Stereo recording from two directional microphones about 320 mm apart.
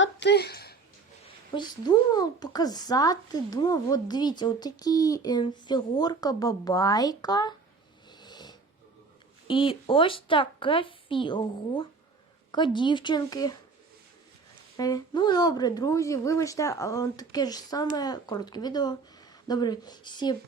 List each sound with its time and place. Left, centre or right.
0.0 s a sound: left
1.5 s speech: centre
8.2 s snoring: centre
9.5 s speech: centre
14.8 s speech: centre